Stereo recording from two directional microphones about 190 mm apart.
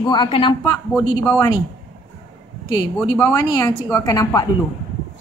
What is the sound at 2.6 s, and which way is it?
A woman's voice, 20° left (ahead or behind).